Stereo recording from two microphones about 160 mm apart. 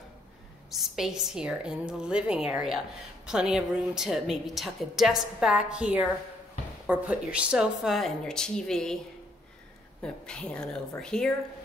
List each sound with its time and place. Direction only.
0.7 s speech: centre (ahead or behind)
10.0 s speech: 5° left (ahead or behind)